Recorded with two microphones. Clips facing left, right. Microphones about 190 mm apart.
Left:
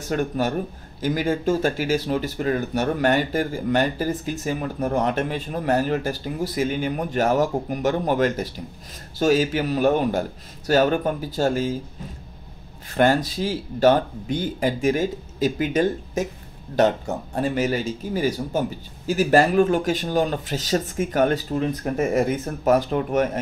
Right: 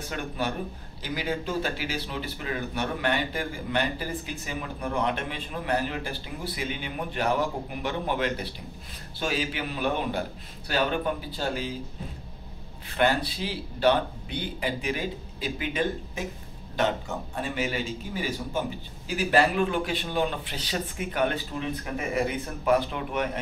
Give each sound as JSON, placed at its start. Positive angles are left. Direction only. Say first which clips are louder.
{"t": 0.1, "sound": "speech", "louder": "left 9 dB", "side_deg": 45}
{"t": 12.9, "sound": "speech", "louder": "left 6 dB", "side_deg": 45}